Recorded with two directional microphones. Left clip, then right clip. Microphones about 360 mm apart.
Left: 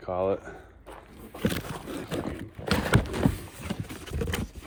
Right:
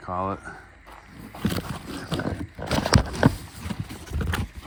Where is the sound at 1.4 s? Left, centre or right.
Centre.